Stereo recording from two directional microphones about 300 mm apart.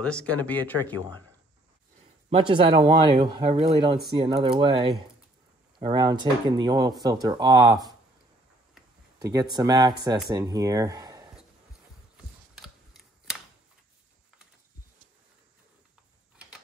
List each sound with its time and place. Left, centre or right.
0.0 s speech: centre
2.2 s speech: centre
12.5 s scissors: centre